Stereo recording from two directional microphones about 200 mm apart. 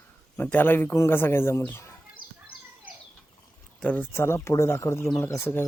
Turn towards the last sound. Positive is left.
turn(degrees=15)  # may be behind; listen again after turning